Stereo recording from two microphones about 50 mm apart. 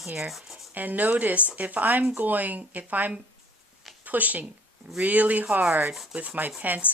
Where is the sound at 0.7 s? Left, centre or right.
Right.